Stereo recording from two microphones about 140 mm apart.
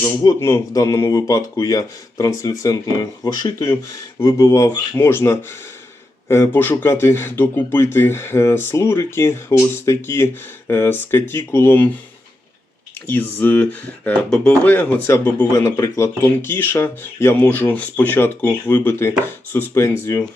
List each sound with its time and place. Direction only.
0.2 s speech: 25° left (ahead or behind)
13.1 s speech: 15° left (ahead or behind)